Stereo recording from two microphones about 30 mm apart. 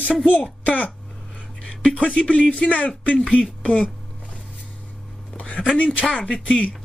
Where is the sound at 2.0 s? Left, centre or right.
Left.